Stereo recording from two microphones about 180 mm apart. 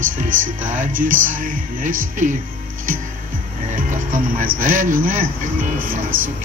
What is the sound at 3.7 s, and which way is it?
Speech, 50° right (ahead or behind).